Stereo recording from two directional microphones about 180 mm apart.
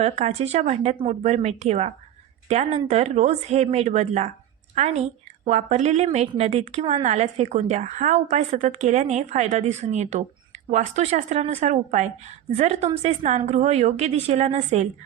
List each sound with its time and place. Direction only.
0.0 s a woman's voice: 35° right (ahead or behind)